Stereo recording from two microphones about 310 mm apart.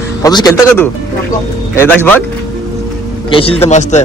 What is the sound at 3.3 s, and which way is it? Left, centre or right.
Speech, centre.